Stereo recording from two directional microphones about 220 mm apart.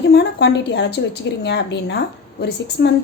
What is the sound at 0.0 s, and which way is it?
A woman's voice, 50° left (ahead or behind).